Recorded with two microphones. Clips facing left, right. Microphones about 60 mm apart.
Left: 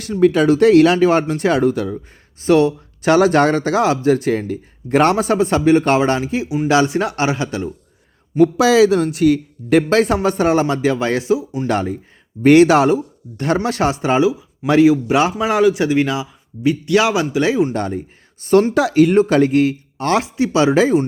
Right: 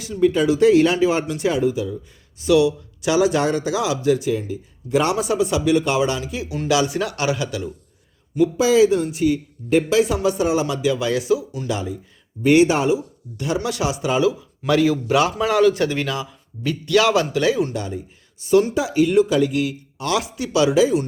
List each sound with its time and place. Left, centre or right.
0.0 s speech: left
2.4 s a man's voice: left
8.4 s speech: left
11.7 s a man's voice: left
12.4 s speech: left
13.6 s speech: left
14.7 s a man's voice: left
17.7 s speech: left
18.7 s speech: left
19.1 s a man's voice: left
20.7 s a man's voice: left